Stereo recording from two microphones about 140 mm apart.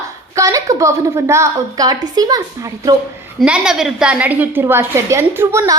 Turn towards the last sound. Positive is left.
turn(degrees=-20)  # may be behind; listen again after turning